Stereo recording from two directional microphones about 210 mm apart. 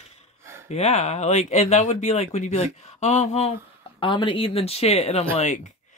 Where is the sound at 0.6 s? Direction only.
30° left (ahead or behind).